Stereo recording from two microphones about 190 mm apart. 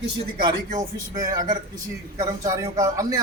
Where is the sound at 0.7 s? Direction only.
20° right (ahead or behind).